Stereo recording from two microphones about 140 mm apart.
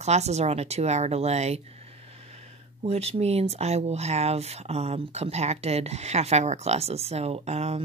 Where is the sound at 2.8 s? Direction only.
45° right (ahead or behind).